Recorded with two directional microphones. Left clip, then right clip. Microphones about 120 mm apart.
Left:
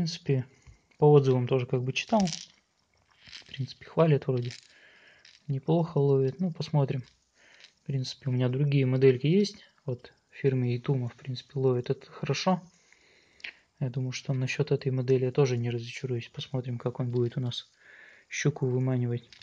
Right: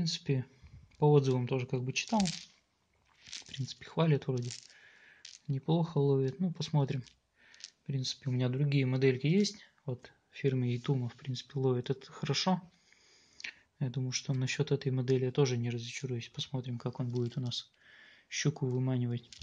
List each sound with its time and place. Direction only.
0.1 s speech: 40° left (ahead or behind)
2.1 s speech: 5° right (ahead or behind)
3.8 s speech: 35° left (ahead or behind)
4.7 s coin: 30° left (ahead or behind)
5.5 s speech: 30° left (ahead or behind)
6.2 s speech: 20° left (ahead or behind)
13.4 s tick-tock: 30° left (ahead or behind)
14.0 s speech: 20° left (ahead or behind)
15.6 s speech: 40° left (ahead or behind)